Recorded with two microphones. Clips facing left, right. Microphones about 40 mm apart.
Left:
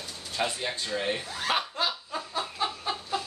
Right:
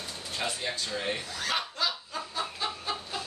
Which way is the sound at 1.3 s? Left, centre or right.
Left.